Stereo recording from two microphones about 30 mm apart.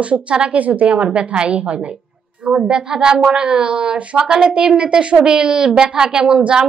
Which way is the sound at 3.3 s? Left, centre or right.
Right.